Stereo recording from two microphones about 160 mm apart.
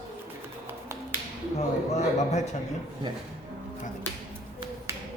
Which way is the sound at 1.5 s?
45° left (ahead or behind).